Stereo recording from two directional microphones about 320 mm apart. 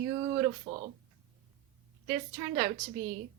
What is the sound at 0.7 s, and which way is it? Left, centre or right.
Speech, centre.